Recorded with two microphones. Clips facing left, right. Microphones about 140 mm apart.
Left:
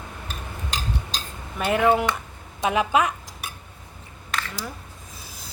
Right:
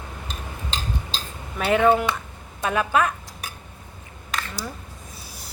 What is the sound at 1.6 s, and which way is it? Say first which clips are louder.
Speech: right 2 dB; 5° left (ahead or behind).